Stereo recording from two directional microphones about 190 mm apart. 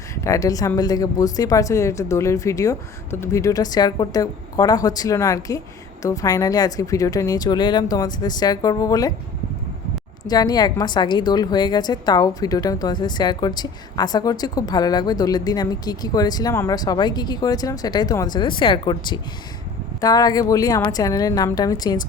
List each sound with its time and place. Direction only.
0.3 s a woman's voice: 20° left (ahead or behind)
10.2 s a woman's voice: 20° left (ahead or behind)